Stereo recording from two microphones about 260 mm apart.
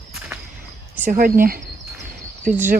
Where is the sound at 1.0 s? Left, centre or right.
Right.